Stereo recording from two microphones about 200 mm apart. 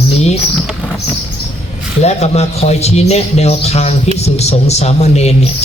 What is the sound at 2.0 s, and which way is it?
Speech, 35° left (ahead or behind).